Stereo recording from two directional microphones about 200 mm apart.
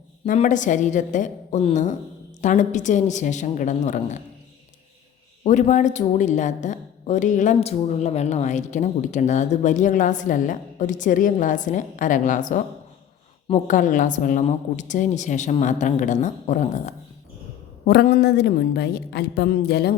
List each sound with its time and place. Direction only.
0.3 s a woman's voice: 40° left (ahead or behind)
5.4 s a woman's voice: 35° left (ahead or behind)
17.8 s a woman's voice: 50° left (ahead or behind)